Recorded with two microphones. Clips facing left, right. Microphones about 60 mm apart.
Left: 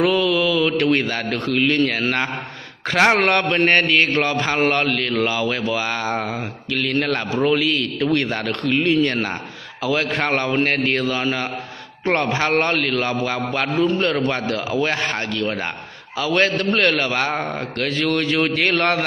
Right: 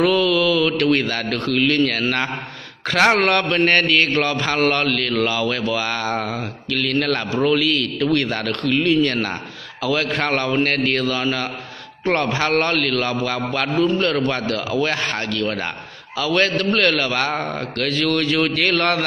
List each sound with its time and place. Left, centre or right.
0.0 s a man's voice: centre
3.2 s mantra: left